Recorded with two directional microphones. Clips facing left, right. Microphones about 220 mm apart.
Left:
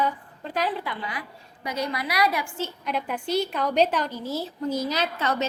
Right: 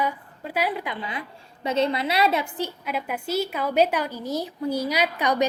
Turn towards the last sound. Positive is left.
turn(degrees=-15)  # may be behind; listen again after turning